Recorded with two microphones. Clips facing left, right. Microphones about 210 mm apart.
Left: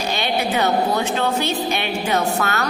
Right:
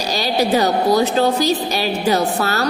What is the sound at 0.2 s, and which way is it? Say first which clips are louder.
A woman's voice: right 6 dB; 35° right (ahead or behind).